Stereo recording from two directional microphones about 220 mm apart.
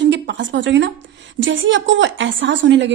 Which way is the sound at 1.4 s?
55° right (ahead or behind).